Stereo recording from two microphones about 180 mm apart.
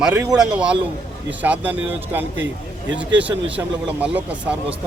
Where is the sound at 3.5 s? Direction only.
5° right (ahead or behind).